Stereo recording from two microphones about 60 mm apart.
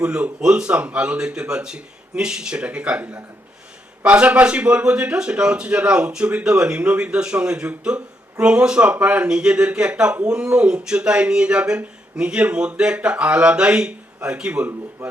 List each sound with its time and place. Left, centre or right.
0.0 s a man's voice: centre
4.0 s a man's voice: centre